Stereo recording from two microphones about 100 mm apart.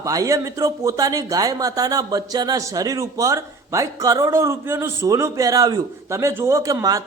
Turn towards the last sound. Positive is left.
turn(degrees=-35)  # may be behind; listen again after turning